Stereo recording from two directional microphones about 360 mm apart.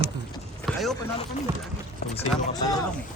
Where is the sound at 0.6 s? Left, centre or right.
Centre.